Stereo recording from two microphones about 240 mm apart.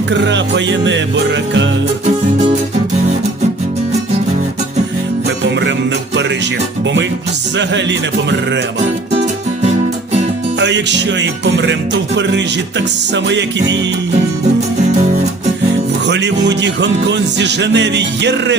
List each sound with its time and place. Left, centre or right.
0.1 s music: right
7.5 s music: right
10.6 s music: right
16.0 s music: right